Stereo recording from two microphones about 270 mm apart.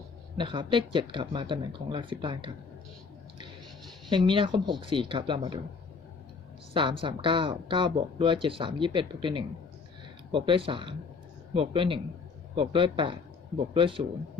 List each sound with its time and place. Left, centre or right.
0.3 s speech: centre
4.1 s speech: centre
6.7 s speech: centre